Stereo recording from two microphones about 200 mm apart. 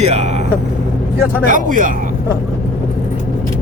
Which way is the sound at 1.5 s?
40° right (ahead or behind).